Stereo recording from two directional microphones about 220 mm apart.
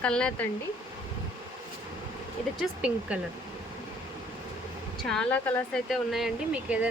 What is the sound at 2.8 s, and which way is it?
Speech, 5° right (ahead or behind).